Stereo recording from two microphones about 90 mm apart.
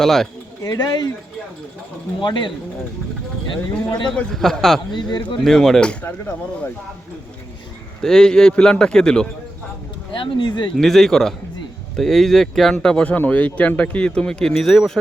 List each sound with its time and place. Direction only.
0.0 s speech: 5° left (ahead or behind)
0.6 s speech: 40° left (ahead or behind)
2.2 s speech: 60° left (ahead or behind)
4.1 s speech: 5° left (ahead or behind)
4.9 s speech: 55° left (ahead or behind)
5.4 s speech: 5° left (ahead or behind)
8.0 s speech: 5° left (ahead or behind)
10.2 s speech: 65° left (ahead or behind)
10.8 s speech: 5° left (ahead or behind)